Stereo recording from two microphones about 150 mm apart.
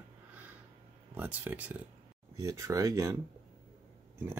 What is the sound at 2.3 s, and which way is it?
Speech, 20° right (ahead or behind).